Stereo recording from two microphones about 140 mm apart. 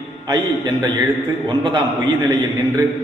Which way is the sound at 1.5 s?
35° right (ahead or behind).